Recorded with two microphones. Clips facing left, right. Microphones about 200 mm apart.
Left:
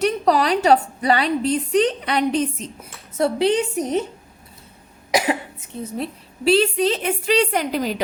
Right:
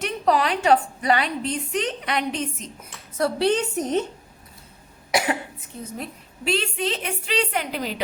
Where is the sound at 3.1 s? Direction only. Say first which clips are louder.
Left 3 dB; 20° left (ahead or behind).